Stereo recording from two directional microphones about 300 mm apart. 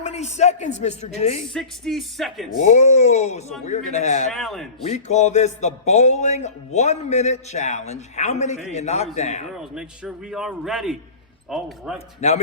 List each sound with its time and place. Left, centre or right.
0.0 s speech: left
1.5 s a man's voice: centre
2.6 s speech: left
4.3 s a man's voice: centre
4.9 s speech: left
9.7 s a man's voice: centre